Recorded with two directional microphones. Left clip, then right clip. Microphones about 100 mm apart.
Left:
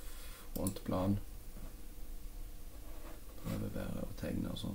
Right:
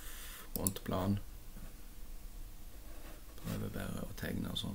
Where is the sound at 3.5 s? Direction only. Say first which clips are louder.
Even; 20° right (ahead or behind).